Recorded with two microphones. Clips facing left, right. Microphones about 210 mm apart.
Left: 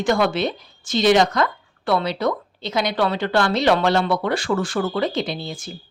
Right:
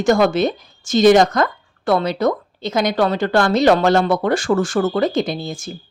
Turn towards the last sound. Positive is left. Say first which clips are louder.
# right 4 dB
turn(degrees=-45)  # may be behind; listen again after turning